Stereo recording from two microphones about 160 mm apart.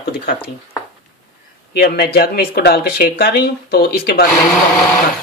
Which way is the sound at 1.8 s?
80° left.